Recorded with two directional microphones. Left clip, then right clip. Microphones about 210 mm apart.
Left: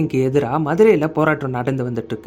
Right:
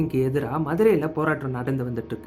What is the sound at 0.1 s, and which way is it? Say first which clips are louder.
Speech: left 7 dB; 35° left (ahead or behind).